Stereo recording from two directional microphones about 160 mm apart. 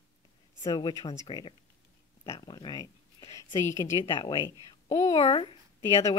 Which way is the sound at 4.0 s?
30° left (ahead or behind).